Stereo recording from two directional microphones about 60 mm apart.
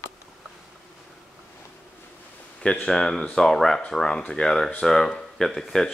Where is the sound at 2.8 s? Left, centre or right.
Centre.